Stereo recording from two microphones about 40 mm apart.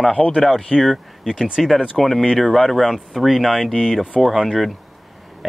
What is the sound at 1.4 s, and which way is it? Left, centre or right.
Speech, centre.